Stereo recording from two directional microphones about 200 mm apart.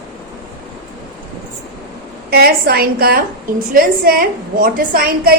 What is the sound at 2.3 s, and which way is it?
A woman's voice, 50° right (ahead or behind).